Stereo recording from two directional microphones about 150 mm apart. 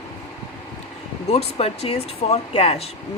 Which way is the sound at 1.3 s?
45° left (ahead or behind).